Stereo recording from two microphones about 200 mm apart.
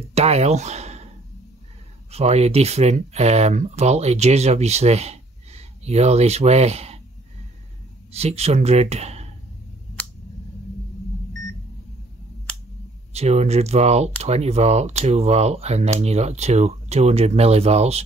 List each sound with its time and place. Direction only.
0.1 s speech: 30° right (ahead or behind)
2.0 s speech: 30° right (ahead or behind)
8.1 s speech: 30° right (ahead or behind)
13.1 s speech: 30° right (ahead or behind)